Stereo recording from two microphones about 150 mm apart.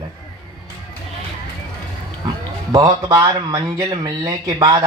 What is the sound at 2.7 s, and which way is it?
Speech, 25° right (ahead or behind).